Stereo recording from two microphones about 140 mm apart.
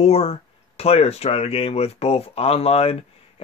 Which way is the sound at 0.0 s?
45° left (ahead or behind).